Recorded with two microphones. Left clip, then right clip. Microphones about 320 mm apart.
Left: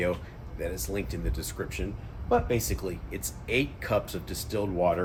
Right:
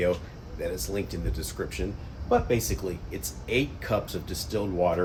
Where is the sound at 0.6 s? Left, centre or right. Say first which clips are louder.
Right 2 dB; centre.